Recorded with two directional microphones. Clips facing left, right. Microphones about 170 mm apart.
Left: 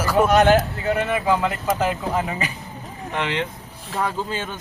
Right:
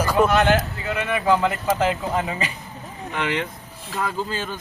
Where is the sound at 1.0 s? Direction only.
30° left (ahead or behind).